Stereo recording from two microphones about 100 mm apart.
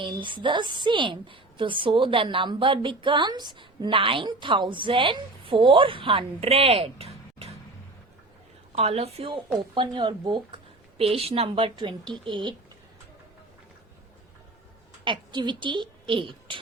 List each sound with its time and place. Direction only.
0.0 s a woman's voice: 55° right (ahead or behind); by 7.5 s 80° right
8.7 s a woman's voice: 85° right
9.7 s speech: 55° right (ahead or behind)
10.9 s a woman's voice: 75° right (ahead or behind); by 12.5 s 55° right (ahead or behind)
15.0 s a woman's voice: 50° right (ahead or behind)